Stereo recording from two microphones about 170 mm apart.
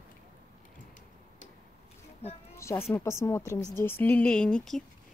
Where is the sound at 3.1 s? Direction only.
15° left (ahead or behind).